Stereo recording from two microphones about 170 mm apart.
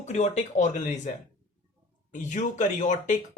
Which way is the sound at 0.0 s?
45° left (ahead or behind).